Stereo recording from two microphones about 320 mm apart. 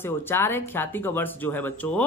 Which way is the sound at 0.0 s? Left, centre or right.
Centre.